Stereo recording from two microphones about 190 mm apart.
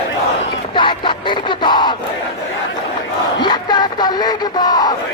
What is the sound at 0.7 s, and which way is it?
Crowd, 25° left (ahead or behind).